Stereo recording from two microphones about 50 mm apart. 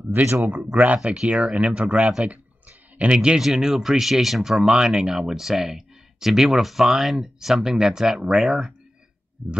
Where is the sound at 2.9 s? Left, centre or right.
Right.